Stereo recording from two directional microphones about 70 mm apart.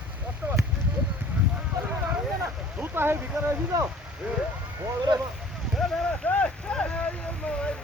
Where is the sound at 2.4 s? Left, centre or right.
Right.